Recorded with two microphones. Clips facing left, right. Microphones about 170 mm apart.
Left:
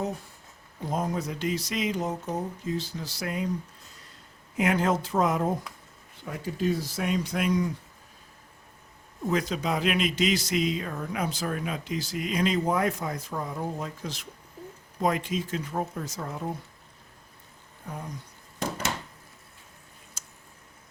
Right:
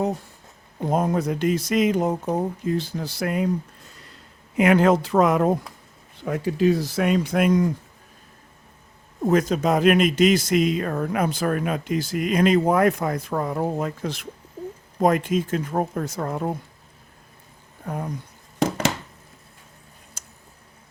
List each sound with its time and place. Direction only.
0.8 s speech: 55° right (ahead or behind)
4.5 s speech: 70° right (ahead or behind); by 7.7 s 50° right (ahead or behind)
9.2 s speech: 45° right (ahead or behind)
17.8 s speech: 60° right (ahead or behind)
18.6 s a sound: 90° right
20.2 s a sound: 50° right (ahead or behind)